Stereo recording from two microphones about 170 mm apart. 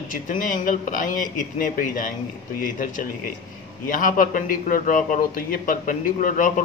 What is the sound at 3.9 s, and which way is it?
A man's voice, 50° left (ahead or behind).